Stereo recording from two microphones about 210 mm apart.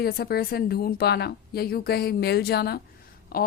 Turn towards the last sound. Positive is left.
turn(degrees=45)  # may be behind; listen again after turning